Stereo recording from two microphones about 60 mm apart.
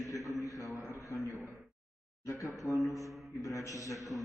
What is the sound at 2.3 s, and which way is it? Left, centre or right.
Speech, left.